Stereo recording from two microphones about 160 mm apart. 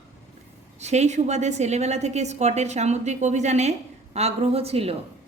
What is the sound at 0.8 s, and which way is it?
A woman's voice, 45° right (ahead or behind).